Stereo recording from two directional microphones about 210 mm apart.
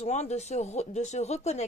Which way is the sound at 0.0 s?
30° left (ahead or behind).